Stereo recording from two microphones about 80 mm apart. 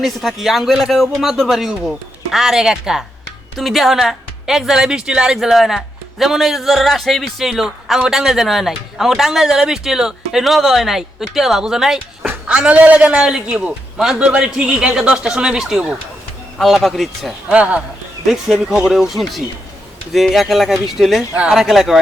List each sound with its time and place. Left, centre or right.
0.0 s speech: centre
12.2 s a sound: right
12.5 s a man's voice: centre
17.5 s a man's voice: centre
18.3 s speech: centre